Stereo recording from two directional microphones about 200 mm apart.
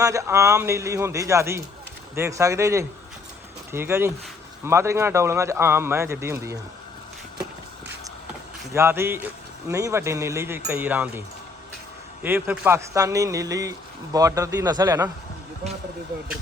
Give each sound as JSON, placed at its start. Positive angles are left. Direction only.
{"t": 0.0, "sound": "speech", "side_deg": -15}
{"t": 8.7, "sound": "speech", "side_deg": -15}
{"t": 12.2, "sound": "speech", "side_deg": -10}